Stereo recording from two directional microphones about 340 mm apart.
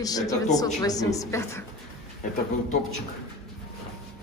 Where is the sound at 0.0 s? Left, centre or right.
Centre.